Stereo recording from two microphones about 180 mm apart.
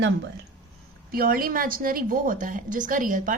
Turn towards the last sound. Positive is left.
turn(degrees=-50)  # may be behind; listen again after turning